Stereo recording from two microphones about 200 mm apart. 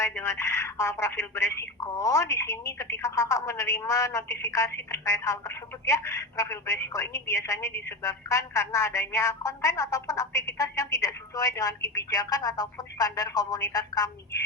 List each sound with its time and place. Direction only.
0.0 s speech: 15° left (ahead or behind)